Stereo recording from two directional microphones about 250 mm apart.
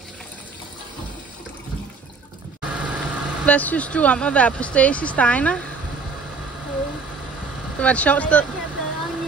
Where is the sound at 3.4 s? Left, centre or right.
Centre.